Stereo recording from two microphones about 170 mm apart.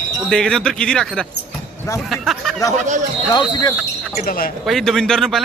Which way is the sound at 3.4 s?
25° left (ahead or behind).